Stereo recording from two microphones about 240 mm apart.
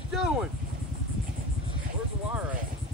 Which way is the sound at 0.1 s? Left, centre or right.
Centre.